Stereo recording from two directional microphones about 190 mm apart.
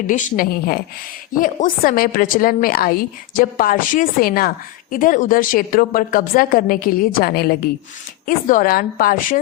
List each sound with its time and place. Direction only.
0.1 s a woman's voice: 40° left (ahead or behind)